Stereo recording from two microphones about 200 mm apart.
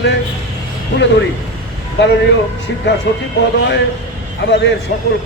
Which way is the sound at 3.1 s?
65° left (ahead or behind).